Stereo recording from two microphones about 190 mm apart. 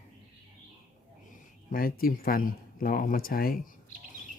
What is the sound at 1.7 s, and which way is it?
Speech, 50° left (ahead or behind).